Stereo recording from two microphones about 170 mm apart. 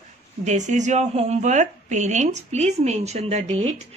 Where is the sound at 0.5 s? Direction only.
45° right (ahead or behind).